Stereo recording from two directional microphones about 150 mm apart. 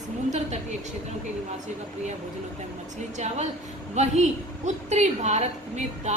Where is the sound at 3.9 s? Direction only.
50° right (ahead or behind).